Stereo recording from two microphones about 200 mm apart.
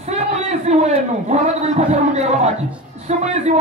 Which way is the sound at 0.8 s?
35° right (ahead or behind).